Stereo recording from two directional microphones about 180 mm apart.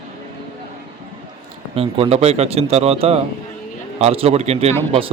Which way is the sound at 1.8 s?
35° right (ahead or behind).